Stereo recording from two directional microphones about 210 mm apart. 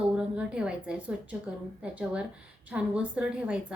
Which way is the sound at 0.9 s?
5° right (ahead or behind).